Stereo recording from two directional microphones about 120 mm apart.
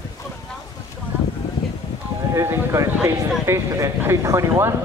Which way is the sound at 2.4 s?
20° right (ahead or behind).